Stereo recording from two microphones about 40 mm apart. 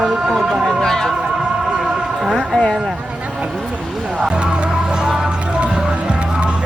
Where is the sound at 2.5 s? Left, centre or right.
Centre.